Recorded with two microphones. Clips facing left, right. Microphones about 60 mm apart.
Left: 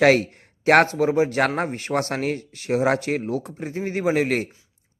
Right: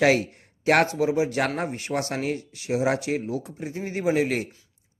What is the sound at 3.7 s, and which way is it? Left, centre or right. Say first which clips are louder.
Speech: left 2 dB; left.